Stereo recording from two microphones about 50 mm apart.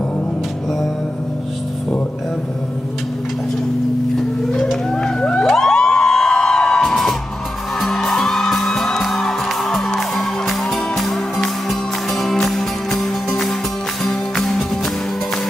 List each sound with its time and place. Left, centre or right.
4.9 s music: centre
5.4 s music: centre